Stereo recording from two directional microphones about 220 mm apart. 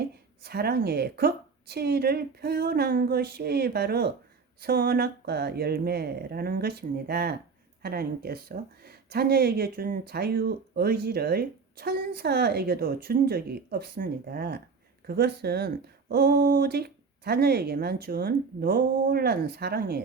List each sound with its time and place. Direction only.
0.0 s speech: 45° right (ahead or behind)